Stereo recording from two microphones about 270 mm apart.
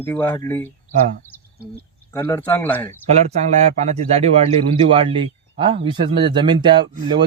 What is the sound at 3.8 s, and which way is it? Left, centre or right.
Speech, right.